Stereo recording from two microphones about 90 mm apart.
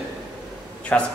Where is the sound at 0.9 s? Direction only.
15° left (ahead or behind).